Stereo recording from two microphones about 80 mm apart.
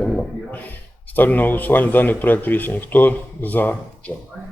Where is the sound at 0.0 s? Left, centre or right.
Centre.